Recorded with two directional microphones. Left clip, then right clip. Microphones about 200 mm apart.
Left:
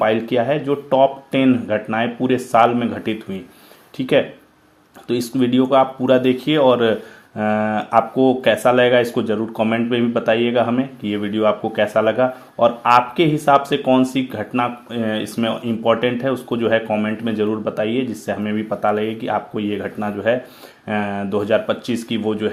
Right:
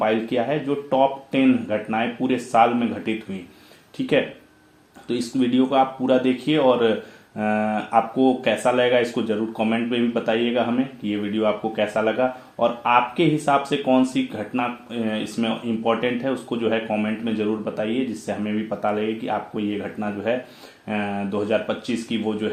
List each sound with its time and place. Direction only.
0.0 s speech: 40° left (ahead or behind)